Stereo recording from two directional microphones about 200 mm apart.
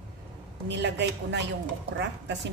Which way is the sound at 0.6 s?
60° right (ahead or behind).